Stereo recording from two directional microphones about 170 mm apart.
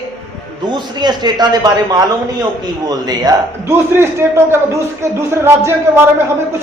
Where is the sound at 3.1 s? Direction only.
20° right (ahead or behind).